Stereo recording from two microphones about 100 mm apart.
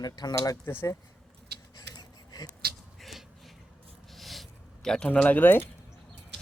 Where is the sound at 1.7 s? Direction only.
45° left (ahead or behind).